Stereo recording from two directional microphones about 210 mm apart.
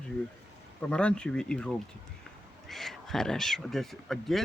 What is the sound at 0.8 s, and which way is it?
Speech, 5° left (ahead or behind).